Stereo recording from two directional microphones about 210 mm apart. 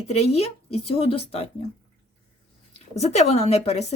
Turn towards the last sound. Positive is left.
turn(degrees=30)  # may be behind; listen again after turning